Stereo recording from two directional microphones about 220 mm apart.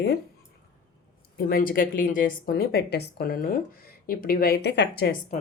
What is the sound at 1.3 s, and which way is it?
A woman's voice, 40° left (ahead or behind).